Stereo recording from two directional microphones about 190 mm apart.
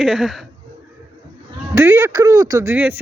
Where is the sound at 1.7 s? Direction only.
15° right (ahead or behind).